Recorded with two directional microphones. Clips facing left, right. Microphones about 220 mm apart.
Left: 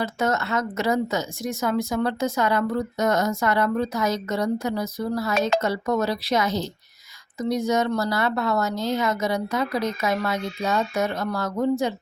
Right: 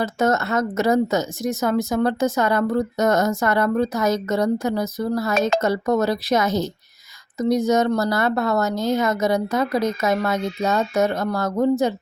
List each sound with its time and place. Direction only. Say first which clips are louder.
0.0 s speech: right 4 dB; 45° right (ahead or behind)